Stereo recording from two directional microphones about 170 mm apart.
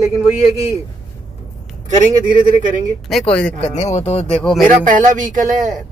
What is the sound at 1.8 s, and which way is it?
Speech, 55° right (ahead or behind).